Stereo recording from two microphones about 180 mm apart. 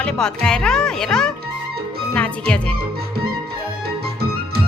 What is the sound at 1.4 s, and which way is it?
Music, 60° right (ahead or behind).